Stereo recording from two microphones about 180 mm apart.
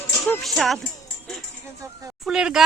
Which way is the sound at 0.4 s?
Centre (ahead or behind).